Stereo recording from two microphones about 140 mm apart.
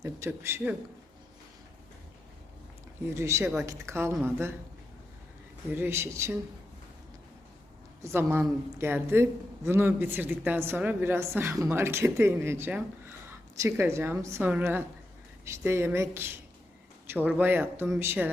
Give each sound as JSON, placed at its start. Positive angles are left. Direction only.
{"t": 0.0, "sound": "a woman's voice", "side_deg": -20}
{"t": 3.2, "sound": "a woman's voice", "side_deg": -20}
{"t": 5.7, "sound": "a woman's voice", "side_deg": -15}
{"t": 8.0, "sound": "a woman's voice", "side_deg": -15}